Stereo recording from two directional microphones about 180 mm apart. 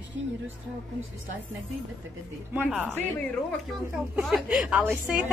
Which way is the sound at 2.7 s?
10° right (ahead or behind).